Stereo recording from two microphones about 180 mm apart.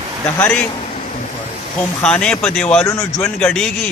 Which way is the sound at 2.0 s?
5° left (ahead or behind).